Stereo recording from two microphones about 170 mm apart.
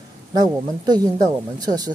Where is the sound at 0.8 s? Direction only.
25° right (ahead or behind).